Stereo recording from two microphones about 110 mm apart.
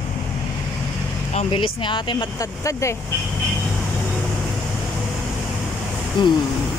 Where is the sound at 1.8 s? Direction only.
45° left (ahead or behind).